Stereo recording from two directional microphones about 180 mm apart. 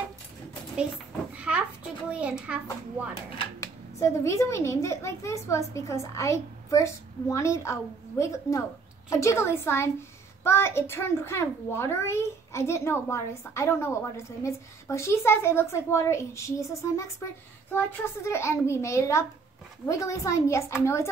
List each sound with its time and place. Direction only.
1.3 s a sound: 5° right (ahead or behind)
2.0 s a child's voice: 5° right (ahead or behind)
3.6 s a child's voice: 15° left (ahead or behind)